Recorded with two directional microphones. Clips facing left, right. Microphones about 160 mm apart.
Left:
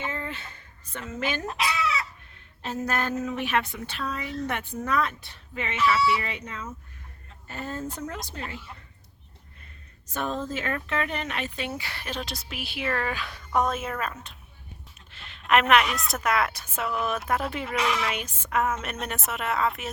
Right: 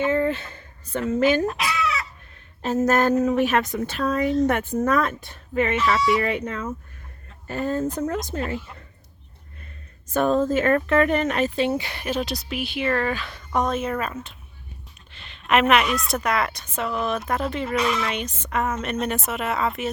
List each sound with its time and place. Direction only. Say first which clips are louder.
0.1 s speech: right 13 dB; 40° right (ahead or behind)
1.5 s chicken: right 3 dB; 25° left (ahead or behind)
2.6 s speech: right 9 dB; 45° right (ahead or behind)
10.1 s speech: right 10 dB; 50° right (ahead or behind); by 12.2 s 15° right (ahead or behind)
12.2 s a woman's voice: right 8 dB; centre (ahead or behind)